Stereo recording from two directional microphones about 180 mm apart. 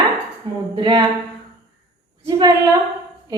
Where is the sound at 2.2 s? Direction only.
20° right (ahead or behind).